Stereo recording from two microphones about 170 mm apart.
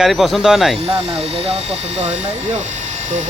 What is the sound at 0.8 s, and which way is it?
Speech, 35° right (ahead or behind).